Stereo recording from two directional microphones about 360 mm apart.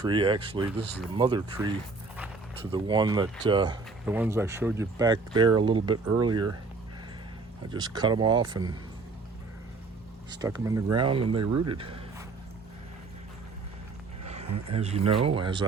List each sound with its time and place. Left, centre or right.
0.0 s speech: centre
7.7 s speech: centre
10.3 s speech: centre
14.3 s speech: centre